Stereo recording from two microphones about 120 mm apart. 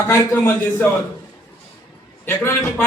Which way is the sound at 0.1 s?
20° left (ahead or behind).